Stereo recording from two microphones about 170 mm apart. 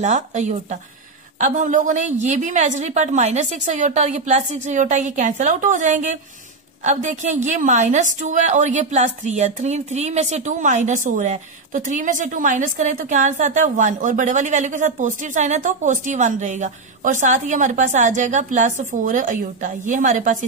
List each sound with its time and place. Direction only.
0.0 s a woman's voice: 45° right (ahead or behind)